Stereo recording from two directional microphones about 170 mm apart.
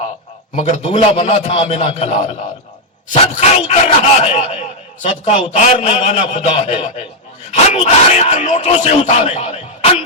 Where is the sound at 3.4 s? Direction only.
40° left (ahead or behind).